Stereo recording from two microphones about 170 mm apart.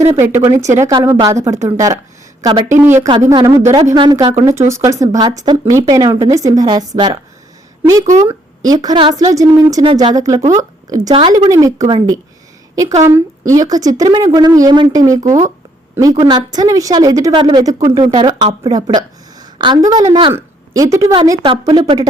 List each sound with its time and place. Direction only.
0.1 s a woman's voice: 15° right (ahead or behind)
2.6 s a woman's voice: 15° right (ahead or behind)